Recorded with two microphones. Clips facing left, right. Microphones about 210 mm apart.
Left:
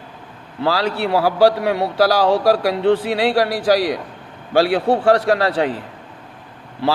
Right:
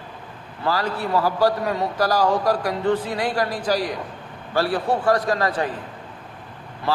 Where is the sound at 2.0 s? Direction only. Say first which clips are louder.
Left 5 dB; 90° left.